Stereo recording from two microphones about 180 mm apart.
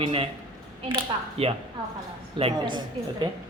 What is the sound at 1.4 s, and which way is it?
A man's voice, 35° right (ahead or behind).